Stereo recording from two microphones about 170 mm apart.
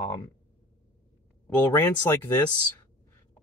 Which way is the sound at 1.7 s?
15° left (ahead or behind).